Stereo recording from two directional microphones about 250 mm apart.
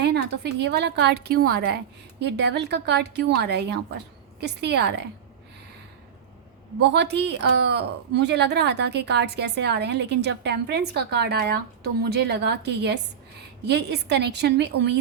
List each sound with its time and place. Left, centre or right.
0.6 s a woman's voice: right
6.9 s a woman's voice: right